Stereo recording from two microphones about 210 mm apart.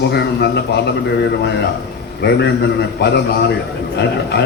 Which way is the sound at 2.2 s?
55° left (ahead or behind).